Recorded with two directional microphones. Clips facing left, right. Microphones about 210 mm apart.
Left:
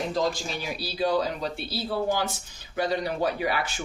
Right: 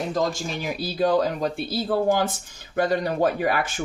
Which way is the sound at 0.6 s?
50° right (ahead or behind).